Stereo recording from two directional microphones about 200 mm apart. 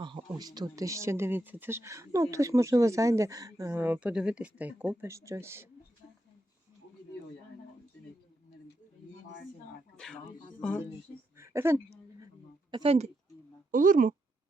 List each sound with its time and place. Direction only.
0.0 s speech: 25° right (ahead or behind)
10.6 s speech: 5° left (ahead or behind)
11.3 s a sound: 15° right (ahead or behind)
12.7 s speech: 30° right (ahead or behind)
13.7 s speech: 40° right (ahead or behind)